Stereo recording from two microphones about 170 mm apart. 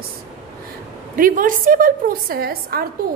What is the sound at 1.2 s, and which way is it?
A woman's voice, 55° right (ahead or behind).